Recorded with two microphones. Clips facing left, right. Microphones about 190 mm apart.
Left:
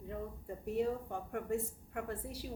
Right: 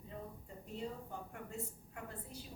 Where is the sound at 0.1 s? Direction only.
65° left (ahead or behind).